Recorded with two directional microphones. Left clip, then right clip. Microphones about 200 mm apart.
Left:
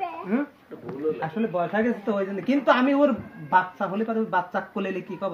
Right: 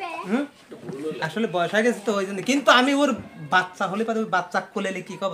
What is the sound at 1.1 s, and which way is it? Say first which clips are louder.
Speech: right 2 dB; 30° right (ahead or behind).